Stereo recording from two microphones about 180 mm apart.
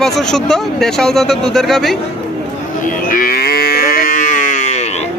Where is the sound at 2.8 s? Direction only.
50° left (ahead or behind).